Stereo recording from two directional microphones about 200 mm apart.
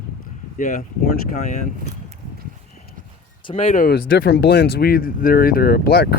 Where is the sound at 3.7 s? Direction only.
45° left (ahead or behind).